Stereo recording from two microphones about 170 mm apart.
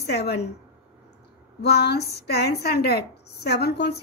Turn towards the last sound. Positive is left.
turn(degrees=75)  # may be behind; listen again after turning